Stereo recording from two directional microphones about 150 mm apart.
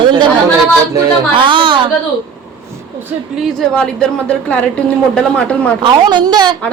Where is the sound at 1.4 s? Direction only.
35° right (ahead or behind).